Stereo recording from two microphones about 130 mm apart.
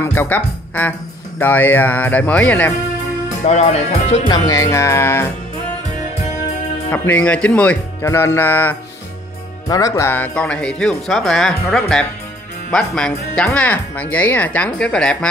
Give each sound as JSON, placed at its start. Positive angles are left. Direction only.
{"t": 0.0, "sound": "speech", "side_deg": 15}
{"t": 3.3, "sound": "speech", "side_deg": 60}
{"t": 4.3, "sound": "speech", "side_deg": 25}
{"t": 6.9, "sound": "speech", "side_deg": 10}
{"t": 8.0, "sound": "speech", "side_deg": 20}
{"t": 9.7, "sound": "speech", "side_deg": 25}